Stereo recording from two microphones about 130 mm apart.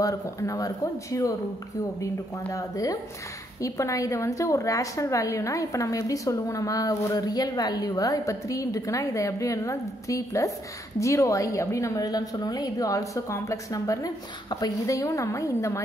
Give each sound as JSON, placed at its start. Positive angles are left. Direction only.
{"t": 0.0, "sound": "a woman's voice", "side_deg": 25}
{"t": 2.5, "sound": "a woman's voice", "side_deg": 25}